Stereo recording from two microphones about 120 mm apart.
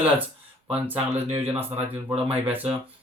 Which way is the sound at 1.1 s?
60° right (ahead or behind).